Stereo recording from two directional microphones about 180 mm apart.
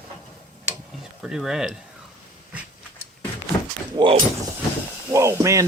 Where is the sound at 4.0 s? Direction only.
25° right (ahead or behind).